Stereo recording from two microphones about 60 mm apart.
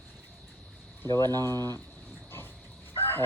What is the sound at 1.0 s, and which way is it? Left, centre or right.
Speech, left.